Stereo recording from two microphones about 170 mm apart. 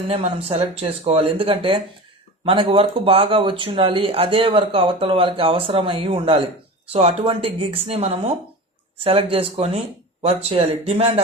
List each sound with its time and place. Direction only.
0.1 s speech: 35° right (ahead or behind)